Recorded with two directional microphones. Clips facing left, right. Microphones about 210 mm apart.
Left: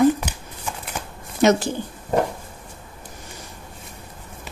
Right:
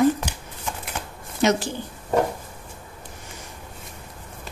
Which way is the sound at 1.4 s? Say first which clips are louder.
Left 4 dB; 50° left (ahead or behind).